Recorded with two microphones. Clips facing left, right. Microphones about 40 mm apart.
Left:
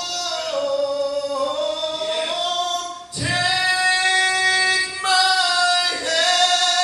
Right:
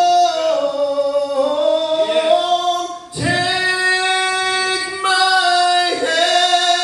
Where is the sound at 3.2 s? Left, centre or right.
Centre.